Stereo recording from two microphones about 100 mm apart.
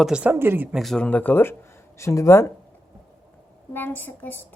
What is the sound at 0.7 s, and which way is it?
Speech, centre (ahead or behind).